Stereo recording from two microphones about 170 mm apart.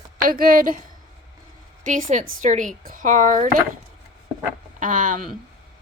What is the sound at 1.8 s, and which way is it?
A woman's voice, 50° right (ahead or behind).